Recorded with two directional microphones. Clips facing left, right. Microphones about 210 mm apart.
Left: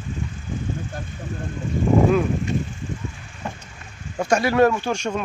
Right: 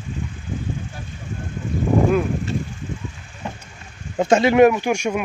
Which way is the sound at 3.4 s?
20° right (ahead or behind).